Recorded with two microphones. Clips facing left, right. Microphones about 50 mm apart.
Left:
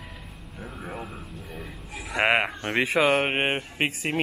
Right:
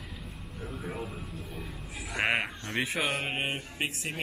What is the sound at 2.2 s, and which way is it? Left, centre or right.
Speech, left.